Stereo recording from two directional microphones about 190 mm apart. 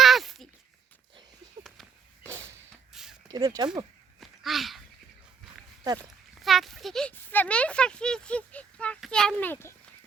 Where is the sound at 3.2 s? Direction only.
20° right (ahead or behind).